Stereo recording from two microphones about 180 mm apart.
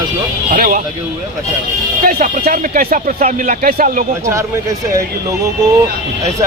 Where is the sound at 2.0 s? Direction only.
50° right (ahead or behind).